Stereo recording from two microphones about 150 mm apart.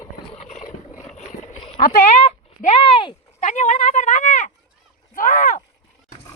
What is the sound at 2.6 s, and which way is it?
Speech, 40° left (ahead or behind).